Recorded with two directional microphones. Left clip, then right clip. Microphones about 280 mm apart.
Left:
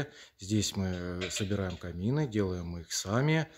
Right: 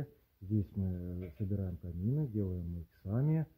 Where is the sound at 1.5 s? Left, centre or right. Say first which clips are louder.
Left 9 dB; centre.